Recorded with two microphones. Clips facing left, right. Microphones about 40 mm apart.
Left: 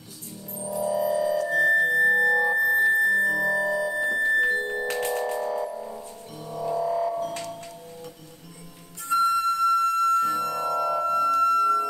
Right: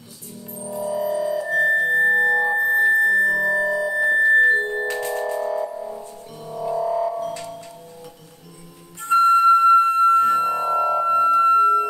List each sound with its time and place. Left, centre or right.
0.5 s music: centre
3.0 s music: right
3.3 s music: centre
9.0 s flute: right